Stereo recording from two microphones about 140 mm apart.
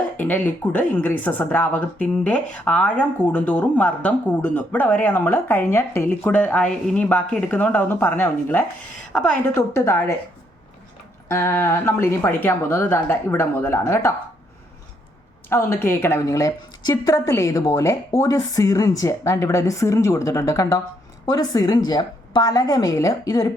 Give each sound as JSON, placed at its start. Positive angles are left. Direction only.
{"t": 0.2, "sound": "a woman's voice", "side_deg": 15}
{"t": 9.6, "sound": "speech", "side_deg": 20}
{"t": 11.3, "sound": "speech", "side_deg": 20}
{"t": 15.4, "sound": "a woman's voice", "side_deg": 15}